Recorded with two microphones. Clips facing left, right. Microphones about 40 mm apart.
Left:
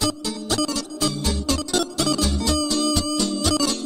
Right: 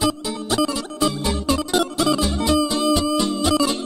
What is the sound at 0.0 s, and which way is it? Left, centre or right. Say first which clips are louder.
Music: right 3 dB; centre.